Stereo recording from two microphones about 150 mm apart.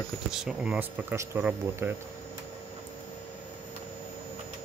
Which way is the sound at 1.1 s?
15° right (ahead or behind).